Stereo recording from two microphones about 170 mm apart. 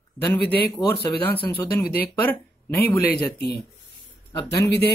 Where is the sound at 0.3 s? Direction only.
10° left (ahead or behind).